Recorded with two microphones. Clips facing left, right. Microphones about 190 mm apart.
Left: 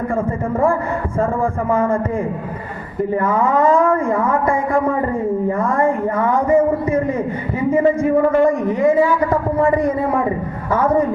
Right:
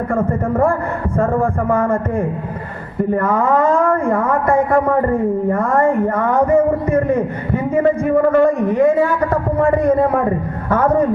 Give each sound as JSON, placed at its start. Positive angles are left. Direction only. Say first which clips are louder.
{"t": 0.1, "sound": "a man's voice", "louder": "right 2 dB", "side_deg": -60}